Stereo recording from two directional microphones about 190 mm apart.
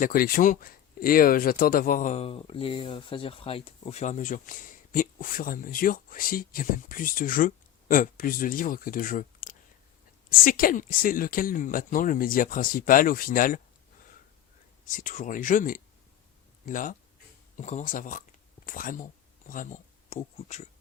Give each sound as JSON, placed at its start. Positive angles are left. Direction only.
{"t": 0.0, "sound": "speech", "side_deg": 50}
{"t": 14.8, "sound": "speech", "side_deg": 45}